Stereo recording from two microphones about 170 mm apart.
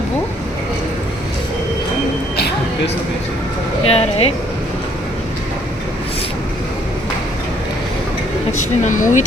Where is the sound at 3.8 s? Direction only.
35° left (ahead or behind).